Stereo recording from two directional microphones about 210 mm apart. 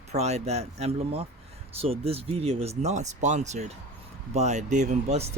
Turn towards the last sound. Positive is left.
turn(degrees=-35)  # may be behind; listen again after turning